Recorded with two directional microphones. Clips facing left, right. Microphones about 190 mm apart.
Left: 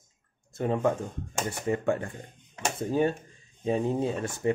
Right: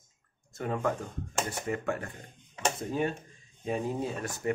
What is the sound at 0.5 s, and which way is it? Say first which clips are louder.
Speech: left 5 dB; 25° left (ahead or behind).